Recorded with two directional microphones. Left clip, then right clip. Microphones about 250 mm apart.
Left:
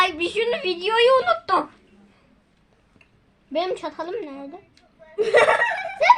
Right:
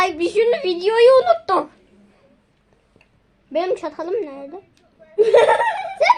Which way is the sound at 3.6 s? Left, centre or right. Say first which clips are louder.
Right 4 dB; centre.